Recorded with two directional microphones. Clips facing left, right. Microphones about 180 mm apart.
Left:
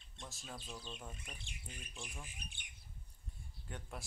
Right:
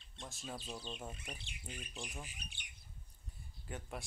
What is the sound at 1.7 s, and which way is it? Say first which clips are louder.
Speech: right 4 dB; 5° right (ahead or behind).